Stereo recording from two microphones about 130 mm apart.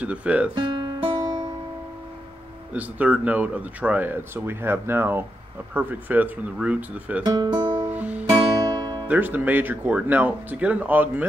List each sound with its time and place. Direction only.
0.0 s speech: 10° right (ahead or behind)
0.6 s music: 35° right (ahead or behind)
2.7 s speech: 10° right (ahead or behind)
7.2 s speech: 35° right (ahead or behind)
7.8 s music: 10° right (ahead or behind)
8.3 s guitar: 35° right (ahead or behind)
9.0 s speech: 15° right (ahead or behind)